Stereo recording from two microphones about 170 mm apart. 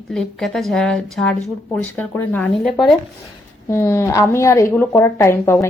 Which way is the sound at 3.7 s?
15° left (ahead or behind).